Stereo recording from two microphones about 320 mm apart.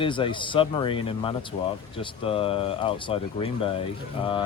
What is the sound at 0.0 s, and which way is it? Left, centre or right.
Speech, centre.